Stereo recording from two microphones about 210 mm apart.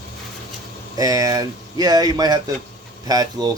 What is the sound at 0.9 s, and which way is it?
Speech, 15° right (ahead or behind).